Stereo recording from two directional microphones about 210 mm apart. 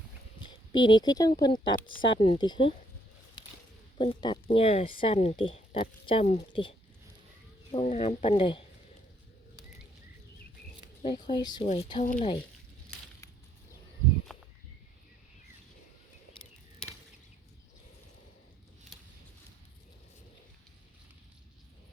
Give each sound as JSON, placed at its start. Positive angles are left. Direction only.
{"t": 0.4, "sound": "speech", "side_deg": 20}
{"t": 3.9, "sound": "speech", "side_deg": 25}
{"t": 11.0, "sound": "speech", "side_deg": 20}
{"t": 14.3, "sound": "a sound", "side_deg": 0}